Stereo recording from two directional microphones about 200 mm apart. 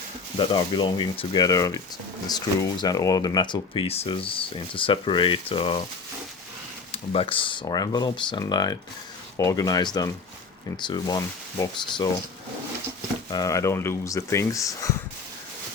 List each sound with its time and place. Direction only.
0.3 s speech: 25° left (ahead or behind)
6.9 s speech: 30° left (ahead or behind)
13.3 s speech: 15° left (ahead or behind)